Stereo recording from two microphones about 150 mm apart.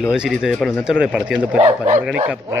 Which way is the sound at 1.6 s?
55° right (ahead or behind).